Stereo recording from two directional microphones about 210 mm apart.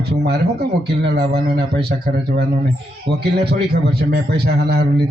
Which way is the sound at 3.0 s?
50° right (ahead or behind).